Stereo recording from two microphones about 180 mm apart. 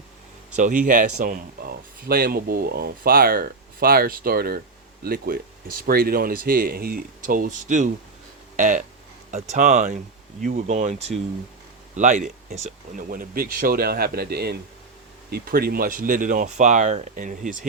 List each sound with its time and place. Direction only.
0.5 s speech: 45° right (ahead or behind)